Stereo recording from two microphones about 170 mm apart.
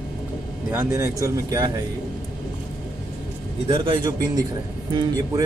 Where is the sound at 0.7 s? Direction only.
15° right (ahead or behind).